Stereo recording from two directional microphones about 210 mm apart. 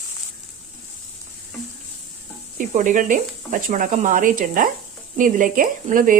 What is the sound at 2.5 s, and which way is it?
Speech, 40° right (ahead or behind).